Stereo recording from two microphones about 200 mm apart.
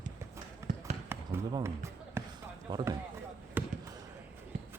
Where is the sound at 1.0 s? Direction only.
15° right (ahead or behind).